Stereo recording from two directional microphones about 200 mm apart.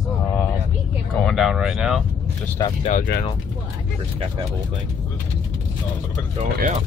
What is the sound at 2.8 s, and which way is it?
Speech, 40° left (ahead or behind).